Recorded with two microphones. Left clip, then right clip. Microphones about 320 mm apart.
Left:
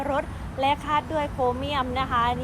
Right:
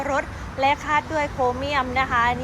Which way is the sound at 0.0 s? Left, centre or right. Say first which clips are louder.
Right 3 dB; centre.